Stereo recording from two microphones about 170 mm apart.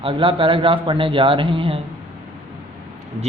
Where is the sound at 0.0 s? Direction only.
30° right (ahead or behind).